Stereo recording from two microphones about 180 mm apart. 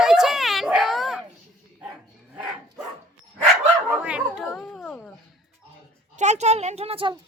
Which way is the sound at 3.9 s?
5° right (ahead or behind).